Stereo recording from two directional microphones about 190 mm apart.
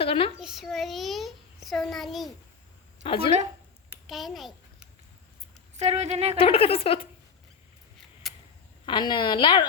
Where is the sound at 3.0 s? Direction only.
30° left (ahead or behind).